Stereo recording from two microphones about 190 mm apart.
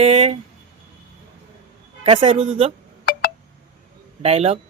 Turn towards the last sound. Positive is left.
turn(degrees=-35)  # may be behind; listen again after turning